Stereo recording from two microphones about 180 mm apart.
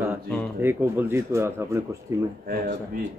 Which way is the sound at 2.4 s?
55° right (ahead or behind).